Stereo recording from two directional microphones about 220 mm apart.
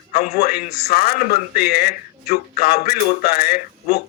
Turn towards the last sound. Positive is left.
turn(degrees=45)  # may be behind; listen again after turning